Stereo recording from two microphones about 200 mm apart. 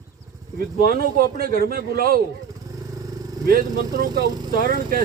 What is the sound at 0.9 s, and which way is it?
Speech, 50° right (ahead or behind).